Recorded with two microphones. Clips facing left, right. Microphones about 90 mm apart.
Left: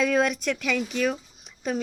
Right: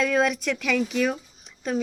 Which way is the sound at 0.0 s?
Centre (ahead or behind).